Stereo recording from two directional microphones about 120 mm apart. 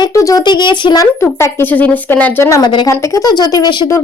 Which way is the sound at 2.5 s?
35° left (ahead or behind).